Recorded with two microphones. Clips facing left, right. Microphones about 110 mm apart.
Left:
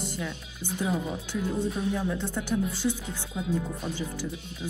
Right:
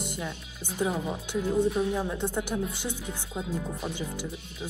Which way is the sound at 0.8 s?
20° right (ahead or behind).